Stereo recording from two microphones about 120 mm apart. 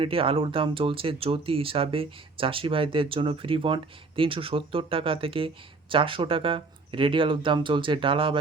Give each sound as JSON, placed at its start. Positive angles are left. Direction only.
{"t": 0.0, "sound": "speech", "side_deg": -50}